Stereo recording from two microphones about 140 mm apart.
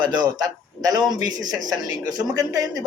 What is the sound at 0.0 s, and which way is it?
Speech, 30° right (ahead or behind).